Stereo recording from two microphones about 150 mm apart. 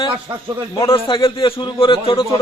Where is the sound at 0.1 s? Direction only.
25° right (ahead or behind).